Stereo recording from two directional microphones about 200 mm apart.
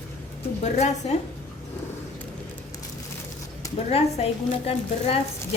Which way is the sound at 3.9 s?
30° left (ahead or behind).